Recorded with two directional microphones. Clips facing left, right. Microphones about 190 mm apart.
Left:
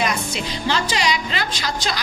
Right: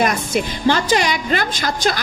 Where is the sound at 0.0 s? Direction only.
50° right (ahead or behind).